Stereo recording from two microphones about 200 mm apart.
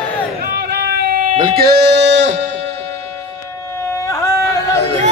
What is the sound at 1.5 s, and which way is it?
Music, 50° right (ahead or behind).